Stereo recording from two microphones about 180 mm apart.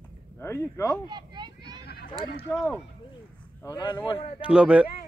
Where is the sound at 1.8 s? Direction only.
65° left (ahead or behind).